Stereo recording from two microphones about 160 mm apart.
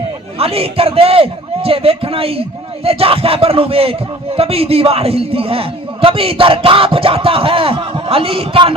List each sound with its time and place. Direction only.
0.3 s a man's voice: 35° right (ahead or behind)